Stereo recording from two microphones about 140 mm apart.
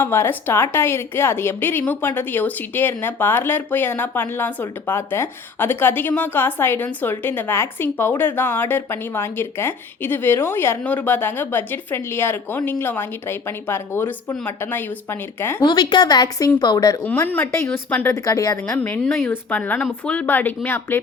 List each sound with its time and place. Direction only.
0.0 s speech: 15° left (ahead or behind)
15.6 s a woman's voice: 30° left (ahead or behind)
17.1 s a woman's voice: 15° left (ahead or behind)
18.7 s speech: 10° left (ahead or behind)